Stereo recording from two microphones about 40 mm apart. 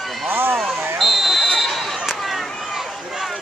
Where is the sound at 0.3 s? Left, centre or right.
Right.